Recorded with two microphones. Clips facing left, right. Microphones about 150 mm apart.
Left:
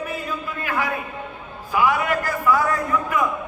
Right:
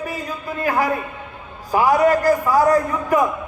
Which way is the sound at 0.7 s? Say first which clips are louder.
Right 6 dB; 40° right (ahead or behind).